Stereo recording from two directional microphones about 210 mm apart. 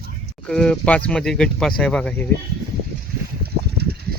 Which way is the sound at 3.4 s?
50° right (ahead or behind).